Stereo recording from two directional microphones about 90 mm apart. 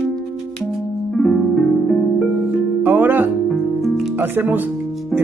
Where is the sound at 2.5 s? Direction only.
20° right (ahead or behind).